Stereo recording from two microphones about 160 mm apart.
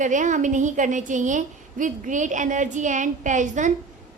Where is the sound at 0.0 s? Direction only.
50° right (ahead or behind).